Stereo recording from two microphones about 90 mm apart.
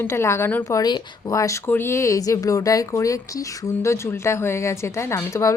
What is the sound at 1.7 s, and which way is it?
Speech, 25° left (ahead or behind).